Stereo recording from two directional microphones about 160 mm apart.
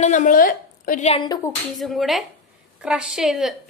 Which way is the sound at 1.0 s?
40° left (ahead or behind).